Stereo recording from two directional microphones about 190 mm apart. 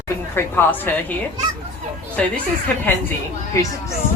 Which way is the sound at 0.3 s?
10° left (ahead or behind).